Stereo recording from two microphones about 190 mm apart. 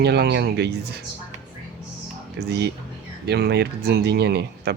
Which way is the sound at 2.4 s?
60° right (ahead or behind).